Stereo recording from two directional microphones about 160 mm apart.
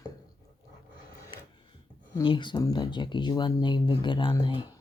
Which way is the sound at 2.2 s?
30° left (ahead or behind).